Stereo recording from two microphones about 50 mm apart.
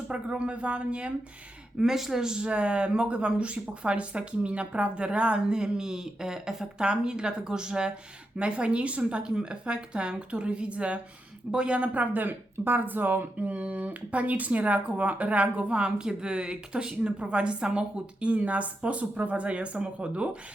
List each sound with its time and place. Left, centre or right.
0.1 s speech: right
1.8 s speech: centre
11.9 s speech: right
13.4 s speech: right